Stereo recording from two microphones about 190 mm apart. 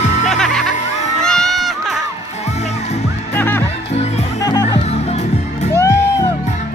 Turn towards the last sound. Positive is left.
turn(degrees=15)  # may be behind; listen again after turning